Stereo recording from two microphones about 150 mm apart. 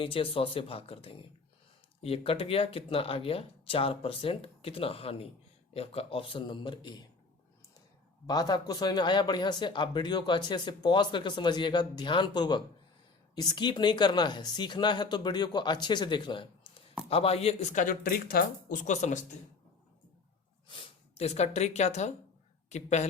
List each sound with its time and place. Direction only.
0.0 s speech: 35° left (ahead or behind)
8.3 s speech: 25° left (ahead or behind); by 18.8 s 80° left
18.8 s speech: 55° left (ahead or behind)
20.7 s speech: 40° left (ahead or behind)